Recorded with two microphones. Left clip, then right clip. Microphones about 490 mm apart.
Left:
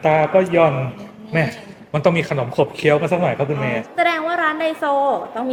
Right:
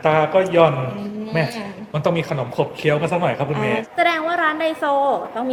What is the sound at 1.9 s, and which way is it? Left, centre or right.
A man's voice, left.